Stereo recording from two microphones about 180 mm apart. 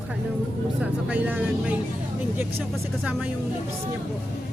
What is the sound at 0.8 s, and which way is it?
Speech, 5° right (ahead or behind).